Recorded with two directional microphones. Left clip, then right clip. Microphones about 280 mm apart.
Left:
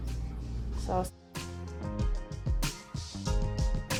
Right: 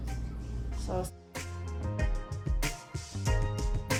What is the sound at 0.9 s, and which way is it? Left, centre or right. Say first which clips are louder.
Speech: left 3 dB; left.